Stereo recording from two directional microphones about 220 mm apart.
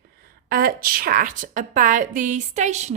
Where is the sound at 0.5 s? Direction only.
40° right (ahead or behind).